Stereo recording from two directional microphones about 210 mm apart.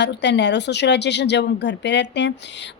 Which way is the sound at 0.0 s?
55° left (ahead or behind).